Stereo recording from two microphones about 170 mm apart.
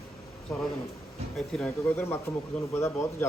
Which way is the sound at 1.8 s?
15° left (ahead or behind).